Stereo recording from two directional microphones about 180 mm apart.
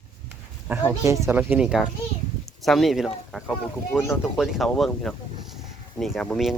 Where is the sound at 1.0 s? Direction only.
15° right (ahead or behind).